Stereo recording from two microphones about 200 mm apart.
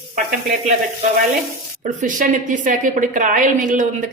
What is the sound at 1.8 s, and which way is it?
A woman's voice, 40° right (ahead or behind).